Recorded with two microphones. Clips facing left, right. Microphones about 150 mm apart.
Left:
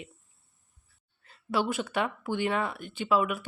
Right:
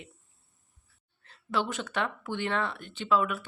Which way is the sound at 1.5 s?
10° left (ahead or behind).